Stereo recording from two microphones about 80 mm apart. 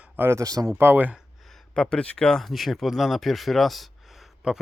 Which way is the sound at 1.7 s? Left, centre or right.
Centre.